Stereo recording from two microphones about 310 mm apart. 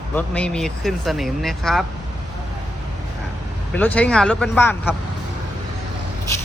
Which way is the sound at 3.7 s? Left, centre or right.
Centre.